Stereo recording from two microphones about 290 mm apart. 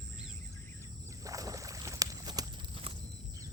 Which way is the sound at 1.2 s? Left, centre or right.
Centre.